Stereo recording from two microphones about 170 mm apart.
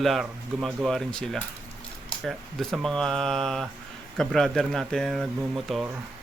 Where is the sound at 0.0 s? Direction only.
Centre (ahead or behind).